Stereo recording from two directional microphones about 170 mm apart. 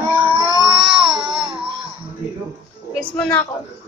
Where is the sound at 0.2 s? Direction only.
30° right (ahead or behind).